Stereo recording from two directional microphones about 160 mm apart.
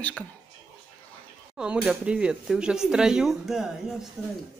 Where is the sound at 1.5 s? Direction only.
5° right (ahead or behind).